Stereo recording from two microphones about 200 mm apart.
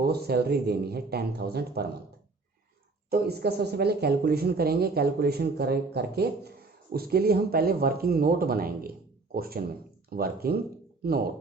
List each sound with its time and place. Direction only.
0.0 s speech: 55° right (ahead or behind)
3.1 s speech: 55° right (ahead or behind)